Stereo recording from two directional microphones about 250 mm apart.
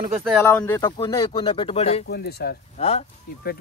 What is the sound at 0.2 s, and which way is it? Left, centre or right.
Speech, centre.